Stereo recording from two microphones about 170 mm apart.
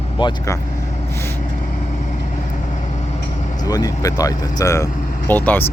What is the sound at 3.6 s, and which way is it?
Speech, 20° left (ahead or behind).